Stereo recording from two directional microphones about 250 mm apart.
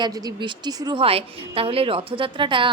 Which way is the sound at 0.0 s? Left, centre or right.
Centre.